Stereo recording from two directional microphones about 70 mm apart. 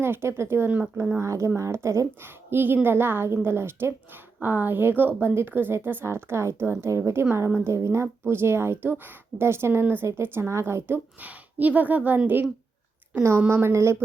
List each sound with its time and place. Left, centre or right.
0.0 s a woman's voice: right
0.7 s a woman's voice: right
1.2 s a woman's voice: right
2.2 s a woman's voice: right
13.5 s a woman's voice: right